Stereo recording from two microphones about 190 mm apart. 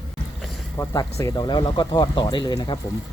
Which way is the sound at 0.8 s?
15° left (ahead or behind).